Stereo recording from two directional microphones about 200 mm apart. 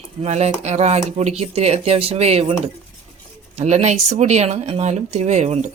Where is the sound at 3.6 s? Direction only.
35° right (ahead or behind).